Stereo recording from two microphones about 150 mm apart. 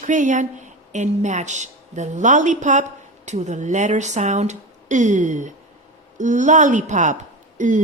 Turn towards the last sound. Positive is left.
turn(degrees=-55)  # may be behind; listen again after turning